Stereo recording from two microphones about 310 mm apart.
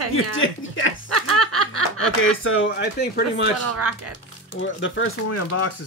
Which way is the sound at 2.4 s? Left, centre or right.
Left.